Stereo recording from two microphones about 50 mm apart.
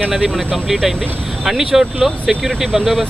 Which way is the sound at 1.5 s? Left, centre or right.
Centre.